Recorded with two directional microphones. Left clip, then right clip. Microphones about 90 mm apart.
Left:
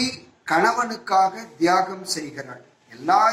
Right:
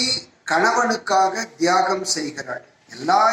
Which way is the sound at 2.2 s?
30° right (ahead or behind).